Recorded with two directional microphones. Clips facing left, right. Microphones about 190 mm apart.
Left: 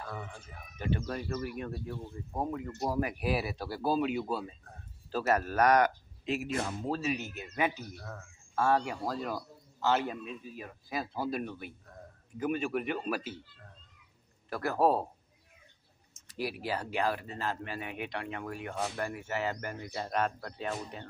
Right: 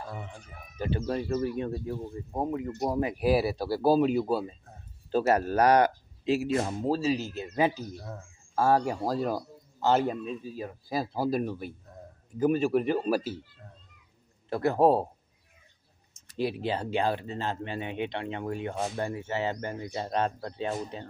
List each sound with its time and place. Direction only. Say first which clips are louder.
0.0 s speech: right 2 dB; 25° right (ahead or behind)
14.5 s speech: right 5 dB; 25° right (ahead or behind)
16.3 s speech: right 5 dB; 25° right (ahead or behind)